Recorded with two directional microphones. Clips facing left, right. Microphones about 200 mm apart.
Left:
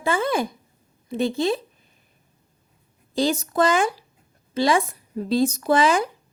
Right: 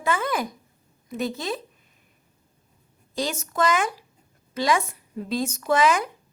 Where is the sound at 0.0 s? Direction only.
30° left (ahead or behind).